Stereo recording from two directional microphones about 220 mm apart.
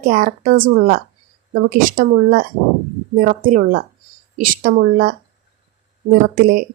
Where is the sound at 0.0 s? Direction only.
40° right (ahead or behind).